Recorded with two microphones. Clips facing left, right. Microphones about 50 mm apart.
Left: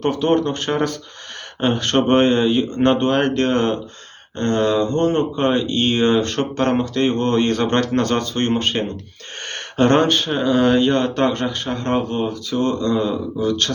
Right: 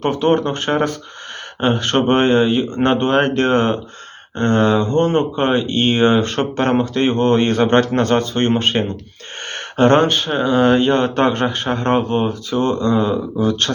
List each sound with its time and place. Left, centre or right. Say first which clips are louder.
0.0 s speech: right 2 dB; centre
12.5 s speech: right 1 dB; centre